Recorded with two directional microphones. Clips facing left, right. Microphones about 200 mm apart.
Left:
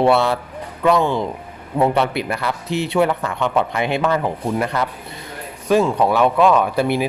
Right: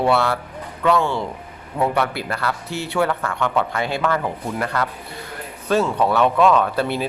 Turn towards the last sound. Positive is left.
turn(degrees=15)  # may be behind; listen again after turning